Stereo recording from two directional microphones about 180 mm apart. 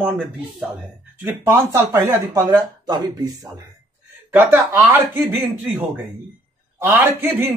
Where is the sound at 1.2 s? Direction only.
15° right (ahead or behind).